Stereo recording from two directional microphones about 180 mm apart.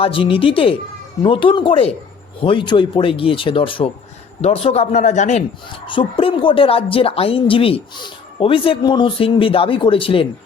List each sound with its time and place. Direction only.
0.0 s speech: 30° left (ahead or behind)
5.8 s speech: 30° left (ahead or behind)